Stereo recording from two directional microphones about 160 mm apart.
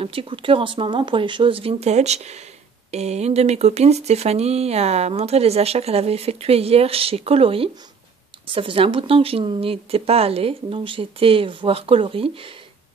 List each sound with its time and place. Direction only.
0.0 s speech: 35° right (ahead or behind)